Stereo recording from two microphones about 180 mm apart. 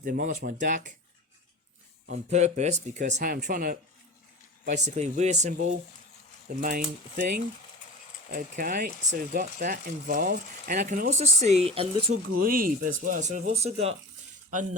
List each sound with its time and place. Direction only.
0.0 s speech: 45° right (ahead or behind)
2.3 s speech: 40° right (ahead or behind)
7.8 s a sound: 45° left (ahead or behind)
8.3 s speech: 50° right (ahead or behind); by 12.2 s 30° right (ahead or behind)
12.4 s speech: 55° right (ahead or behind)